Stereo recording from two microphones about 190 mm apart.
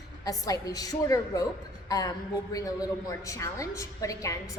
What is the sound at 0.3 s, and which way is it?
A woman's voice, 20° left (ahead or behind).